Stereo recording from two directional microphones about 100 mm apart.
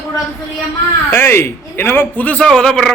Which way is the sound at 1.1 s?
25° left (ahead or behind).